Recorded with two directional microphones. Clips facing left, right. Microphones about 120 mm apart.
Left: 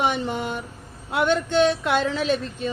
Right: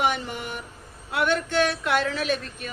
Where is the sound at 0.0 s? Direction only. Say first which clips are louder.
Left 2 dB; 25° left (ahead or behind).